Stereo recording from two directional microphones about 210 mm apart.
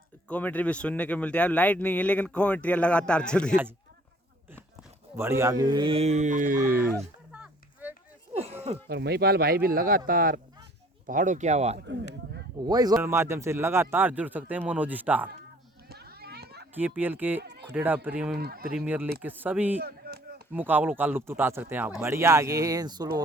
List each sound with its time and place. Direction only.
0.3 s speech: 5° left (ahead or behind)
4.5 s speech: 10° right (ahead or behind); by 6.8 s 40° right (ahead or behind)
6.9 s a sound: 5° right (ahead or behind)
8.3 s a sound: 30° right (ahead or behind)
8.9 s speech: 50° right (ahead or behind); by 11.8 s 30° right (ahead or behind)
12.6 s a man's voice: 20° right (ahead or behind)
15.9 s children playing: 50° right (ahead or behind)
16.7 s a man's voice: 10° right (ahead or behind)
17.4 s speech: 50° right (ahead or behind)
17.7 s a man's voice: 10° right (ahead or behind)
18.3 s speech: 45° right (ahead or behind)
18.8 s a man's voice: 10° right (ahead or behind)
19.8 s chop: 45° right (ahead or behind)
20.5 s a man's voice: 10° right (ahead or behind)